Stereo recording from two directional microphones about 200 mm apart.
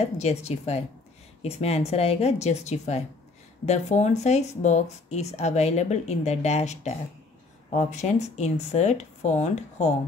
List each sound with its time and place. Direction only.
0.0 s speech: 30° left (ahead or behind)